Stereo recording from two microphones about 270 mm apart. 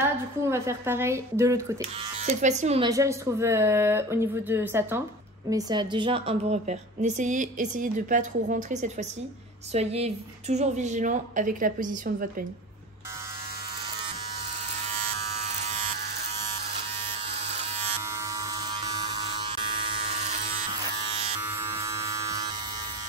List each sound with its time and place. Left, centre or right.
0.4 s speech: centre
2.2 s a woman's voice: right
18.5 s electric shaver: centre
21.5 s electric shaver: centre